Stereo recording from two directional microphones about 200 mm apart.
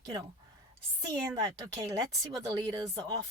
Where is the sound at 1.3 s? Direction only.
15° right (ahead or behind).